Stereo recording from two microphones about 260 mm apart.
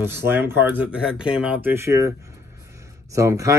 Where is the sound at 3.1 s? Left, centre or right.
Centre.